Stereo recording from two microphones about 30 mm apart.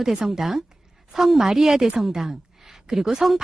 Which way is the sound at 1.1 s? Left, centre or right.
Centre.